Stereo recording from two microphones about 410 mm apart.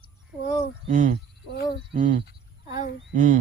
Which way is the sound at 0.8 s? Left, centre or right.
Centre.